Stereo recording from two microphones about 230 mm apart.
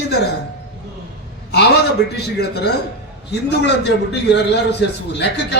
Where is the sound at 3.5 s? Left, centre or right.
Left.